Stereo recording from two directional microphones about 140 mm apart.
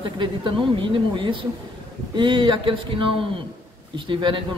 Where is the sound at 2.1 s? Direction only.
35° right (ahead or behind).